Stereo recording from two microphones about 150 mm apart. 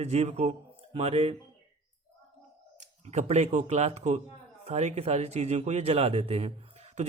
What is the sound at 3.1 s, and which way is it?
A man's voice, 50° right (ahead or behind).